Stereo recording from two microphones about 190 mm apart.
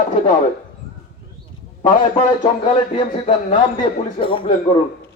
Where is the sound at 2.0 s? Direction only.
30° left (ahead or behind).